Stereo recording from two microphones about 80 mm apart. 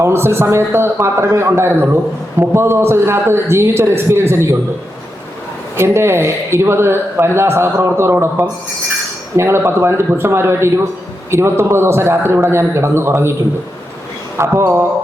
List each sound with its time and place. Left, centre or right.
0.0 s a man's voice: right
5.7 s a man's voice: right
9.3 s a man's voice: right
14.3 s a man's voice: right